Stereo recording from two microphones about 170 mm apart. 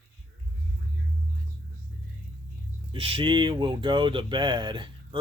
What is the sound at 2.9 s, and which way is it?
Speech, 30° right (ahead or behind).